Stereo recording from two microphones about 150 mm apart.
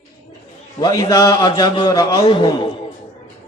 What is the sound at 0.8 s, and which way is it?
A man's voice, 25° left (ahead or behind).